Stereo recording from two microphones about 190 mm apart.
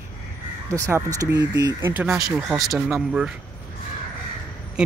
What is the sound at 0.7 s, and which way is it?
Speech, 15° right (ahead or behind).